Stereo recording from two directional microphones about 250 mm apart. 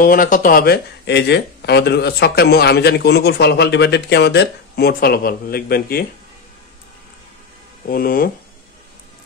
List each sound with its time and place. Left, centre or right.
0.0 s speech: left
7.9 s speech: left